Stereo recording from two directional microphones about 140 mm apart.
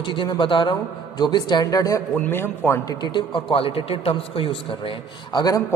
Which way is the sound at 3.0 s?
35° left (ahead or behind).